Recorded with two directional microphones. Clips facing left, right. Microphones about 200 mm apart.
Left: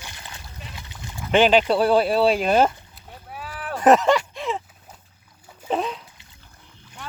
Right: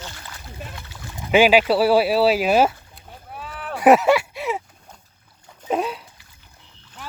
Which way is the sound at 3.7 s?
10° right (ahead or behind).